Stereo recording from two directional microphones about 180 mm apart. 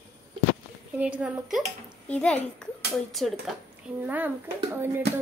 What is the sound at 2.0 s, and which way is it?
A child's voice, 5° left (ahead or behind).